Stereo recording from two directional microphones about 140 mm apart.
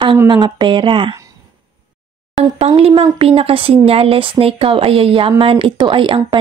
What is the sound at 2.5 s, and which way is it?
A woman's voice, 45° right (ahead or behind).